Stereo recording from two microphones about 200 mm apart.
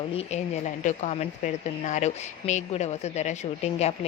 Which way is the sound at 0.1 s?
30° left (ahead or behind).